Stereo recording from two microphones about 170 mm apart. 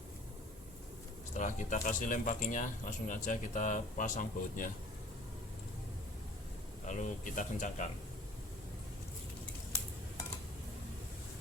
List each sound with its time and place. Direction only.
1.3 s speech: 45° left (ahead or behind)
6.8 s speech: 50° left (ahead or behind)